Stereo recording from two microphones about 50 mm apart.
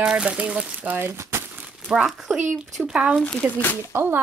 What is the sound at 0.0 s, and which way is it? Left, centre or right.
Speech, right.